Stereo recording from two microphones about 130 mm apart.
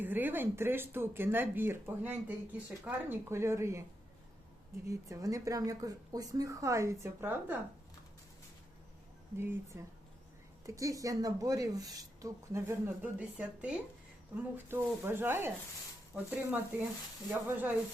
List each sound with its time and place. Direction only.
0.0 s speech: 15° right (ahead or behind)
4.9 s speech: 25° right (ahead or behind)
9.4 s speech: 20° right (ahead or behind)